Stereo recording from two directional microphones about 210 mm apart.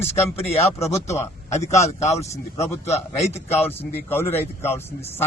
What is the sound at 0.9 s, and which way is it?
Speech, 30° left (ahead or behind).